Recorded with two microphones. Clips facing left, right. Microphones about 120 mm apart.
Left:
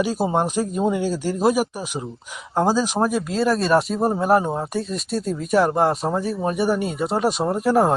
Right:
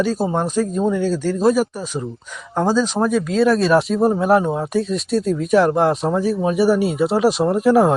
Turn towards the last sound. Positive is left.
turn(degrees=0)  # may be behind; listen again after turning